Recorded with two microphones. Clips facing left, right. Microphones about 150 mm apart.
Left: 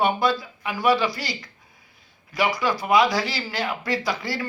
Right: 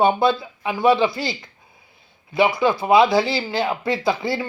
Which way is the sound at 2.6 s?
25° right (ahead or behind).